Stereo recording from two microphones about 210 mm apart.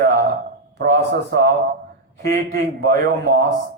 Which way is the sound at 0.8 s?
45° right (ahead or behind).